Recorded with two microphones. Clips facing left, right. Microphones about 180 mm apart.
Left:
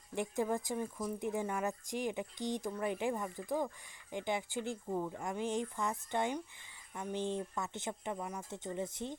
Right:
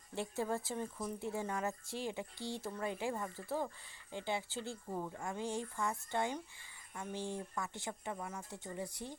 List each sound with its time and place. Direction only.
0.1 s speech: 15° left (ahead or behind)